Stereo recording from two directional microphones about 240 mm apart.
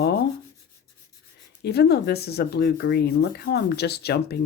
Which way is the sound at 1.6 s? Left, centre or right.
Left.